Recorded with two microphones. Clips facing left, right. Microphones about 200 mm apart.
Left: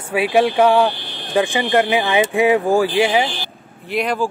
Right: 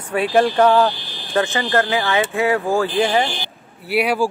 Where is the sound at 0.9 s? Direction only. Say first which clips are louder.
Left 3 dB; 65° left (ahead or behind).